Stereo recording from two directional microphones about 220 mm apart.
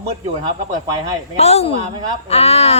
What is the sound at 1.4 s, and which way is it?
A woman's voice, 30° left (ahead or behind).